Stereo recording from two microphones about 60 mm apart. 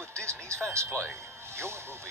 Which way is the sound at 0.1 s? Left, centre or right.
Right.